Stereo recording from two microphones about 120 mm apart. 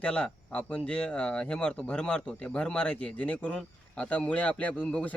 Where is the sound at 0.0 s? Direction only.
10° left (ahead or behind).